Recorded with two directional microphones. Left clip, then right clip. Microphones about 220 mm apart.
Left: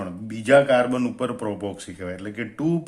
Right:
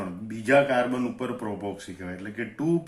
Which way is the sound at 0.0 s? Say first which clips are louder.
Left 2 dB; 45° left (ahead or behind).